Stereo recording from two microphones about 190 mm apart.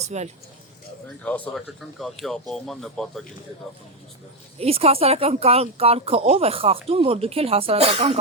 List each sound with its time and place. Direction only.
0.0 s speech: 35° right (ahead or behind)
1.2 s speech: 5° left (ahead or behind)
4.6 s speech: 30° right (ahead or behind)